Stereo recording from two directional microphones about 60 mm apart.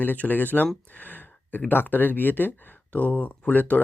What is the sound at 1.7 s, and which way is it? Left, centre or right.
Speech, left.